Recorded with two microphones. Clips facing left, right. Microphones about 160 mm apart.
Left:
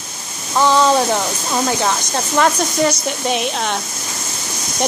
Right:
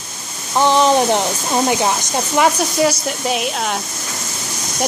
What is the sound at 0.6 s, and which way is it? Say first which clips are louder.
Speech: even; 20° right (ahead or behind).